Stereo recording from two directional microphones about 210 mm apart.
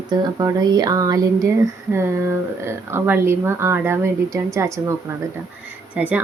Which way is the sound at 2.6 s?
10° right (ahead or behind).